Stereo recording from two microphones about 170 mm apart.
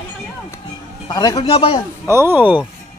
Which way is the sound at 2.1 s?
15° right (ahead or behind).